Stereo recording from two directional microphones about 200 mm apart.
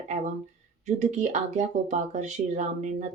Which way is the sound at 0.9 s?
35° right (ahead or behind).